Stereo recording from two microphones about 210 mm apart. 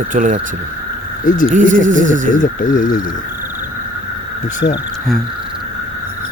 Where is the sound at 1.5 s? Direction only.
40° right (ahead or behind).